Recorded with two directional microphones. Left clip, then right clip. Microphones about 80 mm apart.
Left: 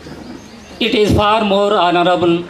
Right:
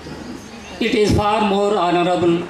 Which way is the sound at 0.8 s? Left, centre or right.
Left.